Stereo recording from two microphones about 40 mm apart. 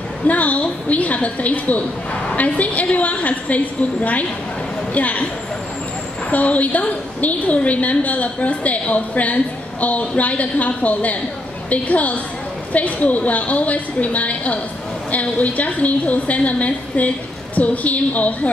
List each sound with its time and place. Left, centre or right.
0.3 s a woman's voice: left
6.3 s a woman's voice: left